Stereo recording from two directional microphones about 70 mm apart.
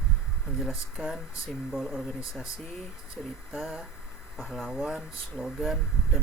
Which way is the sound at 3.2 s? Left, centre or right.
Centre.